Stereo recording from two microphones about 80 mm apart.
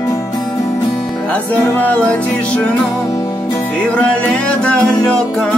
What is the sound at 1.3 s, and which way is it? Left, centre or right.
Music, centre.